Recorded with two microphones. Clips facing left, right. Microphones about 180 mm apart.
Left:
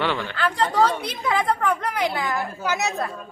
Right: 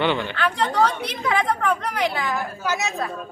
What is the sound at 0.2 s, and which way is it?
A woman's voice, 5° left (ahead or behind).